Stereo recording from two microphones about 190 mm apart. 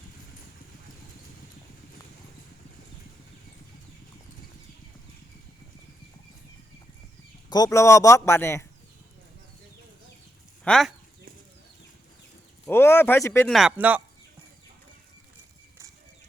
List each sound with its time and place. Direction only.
7.5 s speech: 20° left (ahead or behind)
10.6 s speech: 5° left (ahead or behind)
12.6 s a sound: 10° left (ahead or behind)
13.5 s speech: 5° right (ahead or behind)